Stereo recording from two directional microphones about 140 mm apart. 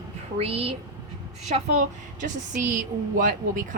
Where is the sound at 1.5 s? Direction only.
60° right (ahead or behind).